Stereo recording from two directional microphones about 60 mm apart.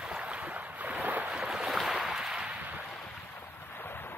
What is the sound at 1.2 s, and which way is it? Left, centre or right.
Boat, centre.